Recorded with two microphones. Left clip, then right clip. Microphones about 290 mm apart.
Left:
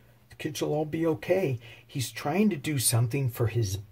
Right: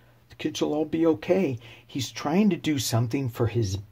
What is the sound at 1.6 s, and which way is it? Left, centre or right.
Speech, right.